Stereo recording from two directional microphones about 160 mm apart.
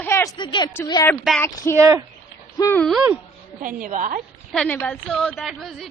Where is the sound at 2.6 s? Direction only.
15° left (ahead or behind).